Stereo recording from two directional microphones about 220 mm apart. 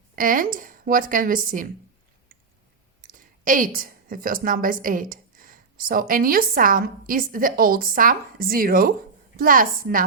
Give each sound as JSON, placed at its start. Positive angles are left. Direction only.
{"t": 0.2, "sound": "a woman's voice", "side_deg": -40}
{"t": 3.1, "sound": "a woman's voice", "side_deg": -35}